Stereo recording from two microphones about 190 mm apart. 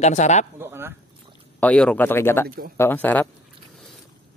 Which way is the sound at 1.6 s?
5° left (ahead or behind).